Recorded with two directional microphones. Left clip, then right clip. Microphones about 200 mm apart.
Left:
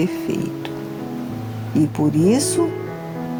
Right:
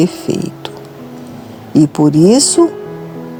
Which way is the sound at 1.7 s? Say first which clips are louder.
Right 9 dB; 40° right (ahead or behind).